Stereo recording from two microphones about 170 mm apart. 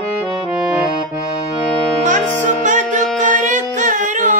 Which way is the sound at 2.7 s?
50° right (ahead or behind).